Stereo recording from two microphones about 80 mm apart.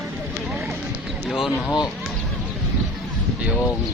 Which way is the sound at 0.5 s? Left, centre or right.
Centre.